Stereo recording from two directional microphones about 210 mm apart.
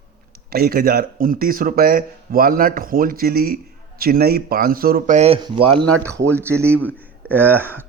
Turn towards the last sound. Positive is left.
turn(degrees=-10)  # may be behind; listen again after turning